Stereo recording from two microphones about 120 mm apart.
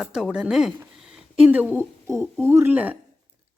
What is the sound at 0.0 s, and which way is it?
A woman's voice, 5° right (ahead or behind).